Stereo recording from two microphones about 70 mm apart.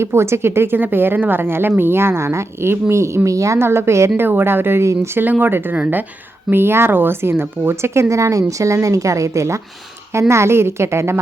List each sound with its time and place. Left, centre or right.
0.0 s speech: right
3.6 s speech: right
4.2 s speech: right